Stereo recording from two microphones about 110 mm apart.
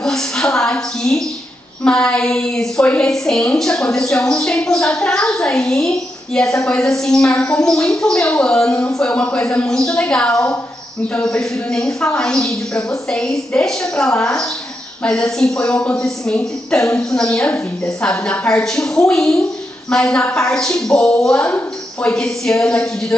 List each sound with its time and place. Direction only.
0.0 s a sound: 5° left (ahead or behind)
1.9 s a woman's voice: 5° left (ahead or behind)
8.7 s speech: 25° left (ahead or behind)
9.0 s a woman's voice: 10° left (ahead or behind)